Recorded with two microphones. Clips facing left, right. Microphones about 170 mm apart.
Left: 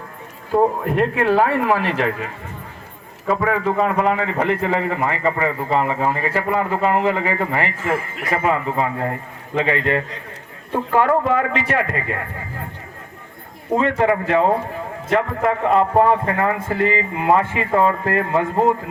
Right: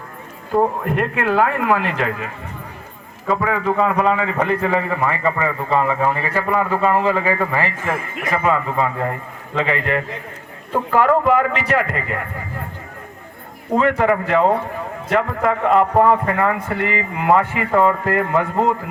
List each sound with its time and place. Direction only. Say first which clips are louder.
1.1 s speech: even; 30° left (ahead or behind)
3.5 s a man's voice: right 2 dB; 30° left (ahead or behind)
7.9 s a man's voice: left 1 dB; 20° right (ahead or behind)
8.3 s a man's voice: right 1 dB; 20° left (ahead or behind)
13.7 s a man's voice: right 1 dB; 25° left (ahead or behind)